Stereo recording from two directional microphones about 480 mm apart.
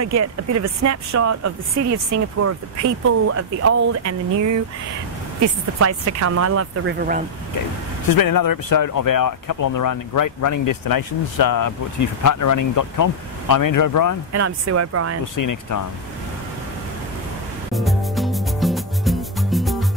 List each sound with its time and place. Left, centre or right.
0.0 s speech: right
8.2 s speech: left
14.3 s speech: right
15.3 s speech: left
17.7 s music: centre